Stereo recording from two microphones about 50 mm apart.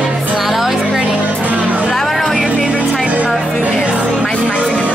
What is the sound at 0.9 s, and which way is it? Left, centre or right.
Music, centre.